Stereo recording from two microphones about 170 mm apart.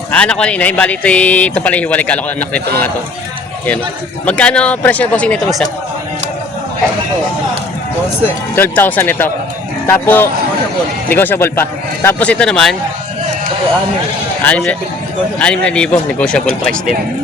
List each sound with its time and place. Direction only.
0.1 s a man's voice: 5° left (ahead or behind)
4.3 s a man's voice: 5° left (ahead or behind)
8.5 s a man's voice: 10° left (ahead or behind)
14.4 s a man's voice: 10° left (ahead or behind)